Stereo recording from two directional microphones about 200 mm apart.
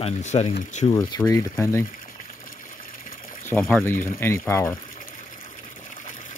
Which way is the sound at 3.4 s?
10° left (ahead or behind).